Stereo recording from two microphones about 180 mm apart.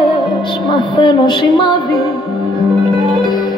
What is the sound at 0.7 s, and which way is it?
Music, 25° left (ahead or behind).